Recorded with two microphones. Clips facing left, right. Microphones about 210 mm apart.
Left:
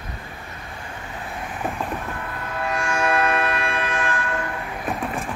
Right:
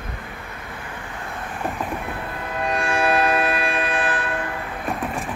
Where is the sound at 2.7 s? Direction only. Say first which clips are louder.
Right 2 dB; 35° right (ahead or behind).